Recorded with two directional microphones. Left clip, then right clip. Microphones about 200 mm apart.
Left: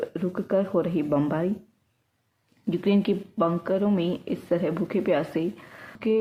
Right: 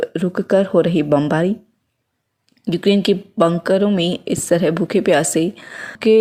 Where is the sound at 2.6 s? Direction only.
35° right (ahead or behind).